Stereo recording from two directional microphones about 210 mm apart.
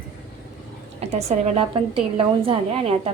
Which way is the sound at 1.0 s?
30° right (ahead or behind).